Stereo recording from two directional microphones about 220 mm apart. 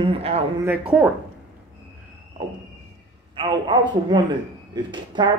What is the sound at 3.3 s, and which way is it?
A man's voice, 20° right (ahead or behind).